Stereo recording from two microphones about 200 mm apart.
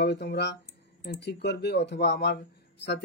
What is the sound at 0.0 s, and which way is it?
Speech, 55° left (ahead or behind).